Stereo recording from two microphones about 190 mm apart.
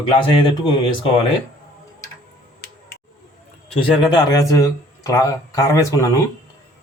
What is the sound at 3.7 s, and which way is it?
Speech, 25° left (ahead or behind).